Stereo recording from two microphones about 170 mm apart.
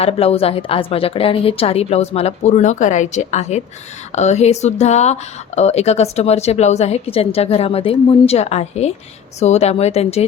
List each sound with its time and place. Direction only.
0.0 s speech: 35° left (ahead or behind)